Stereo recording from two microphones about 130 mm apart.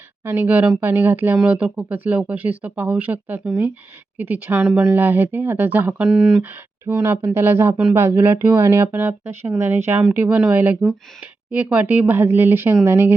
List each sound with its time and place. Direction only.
0.3 s speech: 15° right (ahead or behind)
6.8 s speech: 15° right (ahead or behind)